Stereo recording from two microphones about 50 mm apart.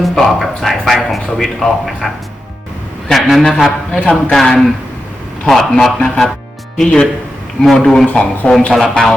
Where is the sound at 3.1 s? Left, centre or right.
Centre.